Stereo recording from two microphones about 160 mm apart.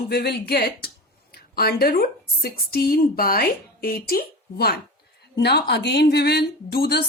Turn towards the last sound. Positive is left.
turn(degrees=85)